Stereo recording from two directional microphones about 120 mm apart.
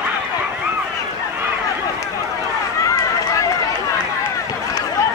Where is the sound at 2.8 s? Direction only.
25° left (ahead or behind).